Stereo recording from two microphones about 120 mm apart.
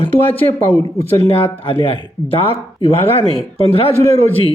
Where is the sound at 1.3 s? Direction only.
50° left (ahead or behind).